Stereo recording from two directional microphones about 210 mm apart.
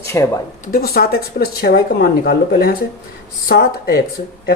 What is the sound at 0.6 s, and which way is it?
Speech, 45° left (ahead or behind).